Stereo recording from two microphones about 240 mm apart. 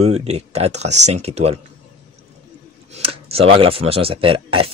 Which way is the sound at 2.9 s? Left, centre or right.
Right.